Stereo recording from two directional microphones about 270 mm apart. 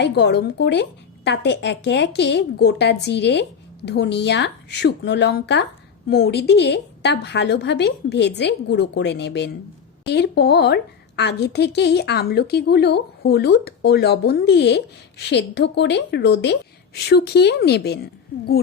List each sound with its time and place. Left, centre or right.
0.0 s a woman's voice: left